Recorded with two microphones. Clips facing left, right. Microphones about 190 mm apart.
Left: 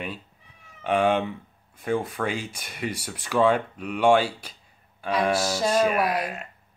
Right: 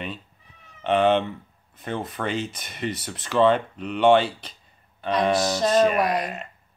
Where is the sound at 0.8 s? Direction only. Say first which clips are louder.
Right 2 dB; 10° left (ahead or behind).